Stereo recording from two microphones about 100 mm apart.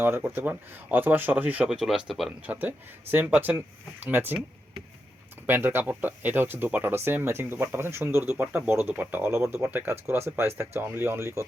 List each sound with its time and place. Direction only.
0.0 s speech: 20° right (ahead or behind); by 2.3 s centre (ahead or behind)
2.5 s speech: 20° right (ahead or behind)
5.5 s speech: 20° right (ahead or behind)